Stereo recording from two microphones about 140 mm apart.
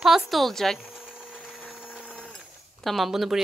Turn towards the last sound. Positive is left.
turn(degrees=0)  # may be behind; listen again after turning